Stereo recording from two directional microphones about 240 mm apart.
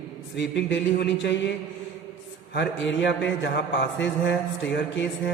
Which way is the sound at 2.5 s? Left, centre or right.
Left.